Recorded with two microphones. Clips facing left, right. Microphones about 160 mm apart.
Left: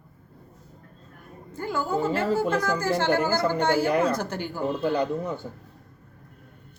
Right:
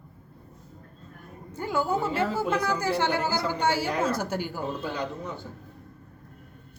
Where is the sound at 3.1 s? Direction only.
50° left (ahead or behind).